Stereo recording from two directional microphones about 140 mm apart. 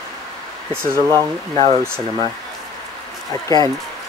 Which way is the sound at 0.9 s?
25° left (ahead or behind).